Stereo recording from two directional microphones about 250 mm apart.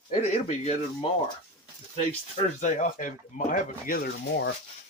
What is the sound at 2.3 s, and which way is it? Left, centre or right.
Speech, left.